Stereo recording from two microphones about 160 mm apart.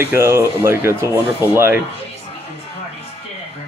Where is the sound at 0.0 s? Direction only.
15° right (ahead or behind).